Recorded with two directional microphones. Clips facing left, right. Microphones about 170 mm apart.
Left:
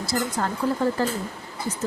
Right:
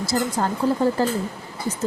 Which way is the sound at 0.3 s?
30° right (ahead or behind).